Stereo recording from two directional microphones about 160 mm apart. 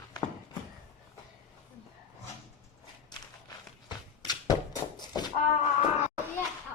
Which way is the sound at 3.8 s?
25° left (ahead or behind).